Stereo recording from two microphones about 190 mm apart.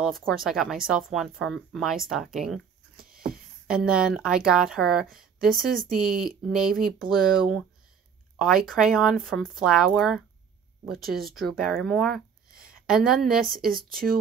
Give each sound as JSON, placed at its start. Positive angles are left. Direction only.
{"t": 0.0, "sound": "speech", "side_deg": 0}
{"t": 3.0, "sound": "a sound", "side_deg": -50}
{"t": 3.6, "sound": "speech", "side_deg": -5}
{"t": 11.1, "sound": "speech", "side_deg": -50}
{"t": 11.3, "sound": "speech", "side_deg": 0}